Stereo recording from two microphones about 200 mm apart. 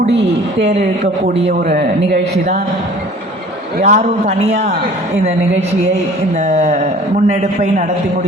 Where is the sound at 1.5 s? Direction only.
50° right (ahead or behind).